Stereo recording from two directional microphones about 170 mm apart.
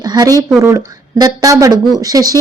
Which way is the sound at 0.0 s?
20° right (ahead or behind).